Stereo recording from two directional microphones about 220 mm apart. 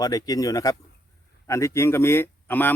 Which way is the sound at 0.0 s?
15° left (ahead or behind).